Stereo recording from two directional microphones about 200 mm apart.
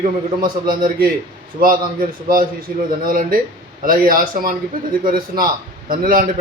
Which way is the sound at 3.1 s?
45° right (ahead or behind).